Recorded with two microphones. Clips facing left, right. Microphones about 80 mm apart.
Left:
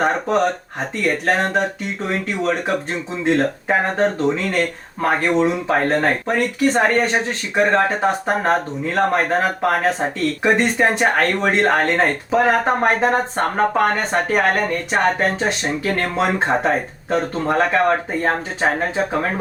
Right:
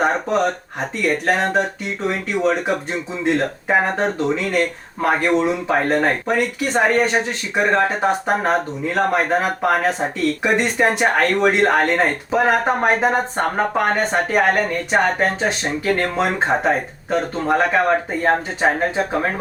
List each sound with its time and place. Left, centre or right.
0.0 s speech: centre